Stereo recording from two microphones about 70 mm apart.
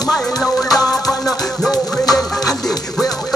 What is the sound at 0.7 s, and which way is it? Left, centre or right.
Music, left.